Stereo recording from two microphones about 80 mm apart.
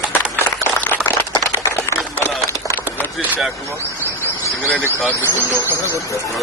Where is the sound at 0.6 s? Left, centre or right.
Left.